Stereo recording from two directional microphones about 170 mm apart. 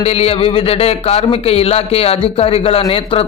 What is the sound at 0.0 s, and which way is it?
A man's voice, 35° left (ahead or behind).